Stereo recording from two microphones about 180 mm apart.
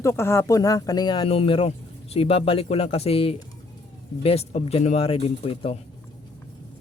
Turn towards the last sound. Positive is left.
turn(degrees=30)  # may be behind; listen again after turning